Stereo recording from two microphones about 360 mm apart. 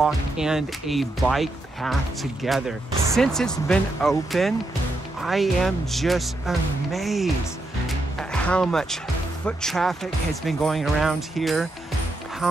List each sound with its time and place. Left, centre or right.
0.0 s speech: centre